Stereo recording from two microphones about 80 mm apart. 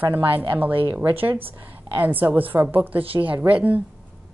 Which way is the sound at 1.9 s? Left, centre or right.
Right.